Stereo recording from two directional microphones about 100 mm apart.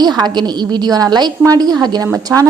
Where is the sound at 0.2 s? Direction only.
45° right (ahead or behind).